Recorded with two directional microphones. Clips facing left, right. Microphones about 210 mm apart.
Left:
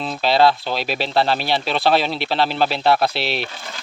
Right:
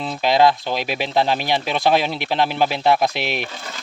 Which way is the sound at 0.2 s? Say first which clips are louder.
Even; 15° right (ahead or behind).